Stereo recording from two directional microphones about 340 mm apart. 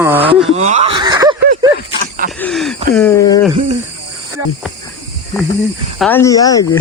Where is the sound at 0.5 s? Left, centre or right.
Centre.